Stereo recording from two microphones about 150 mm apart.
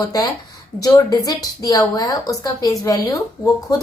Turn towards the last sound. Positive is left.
turn(degrees=20)  # may be behind; listen again after turning